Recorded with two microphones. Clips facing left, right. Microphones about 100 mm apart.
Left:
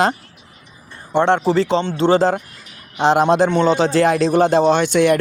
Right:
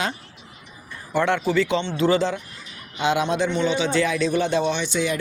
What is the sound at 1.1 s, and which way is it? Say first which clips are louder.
Speech: left 6 dB; 30° left (ahead or behind).